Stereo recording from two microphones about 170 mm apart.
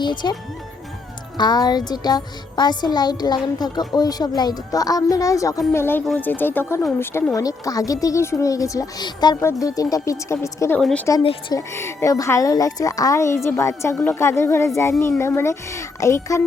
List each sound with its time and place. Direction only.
0.0 s speech: 25° left (ahead or behind)
1.4 s a woman's voice: 25° left (ahead or behind)
10.8 s speech: 5° left (ahead or behind)
11.2 s speech: 30° left (ahead or behind)
11.5 s a woman's voice: 15° left (ahead or behind)